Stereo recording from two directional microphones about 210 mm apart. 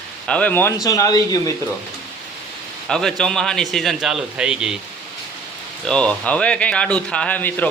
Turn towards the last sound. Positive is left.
turn(degrees=10)  # may be behind; listen again after turning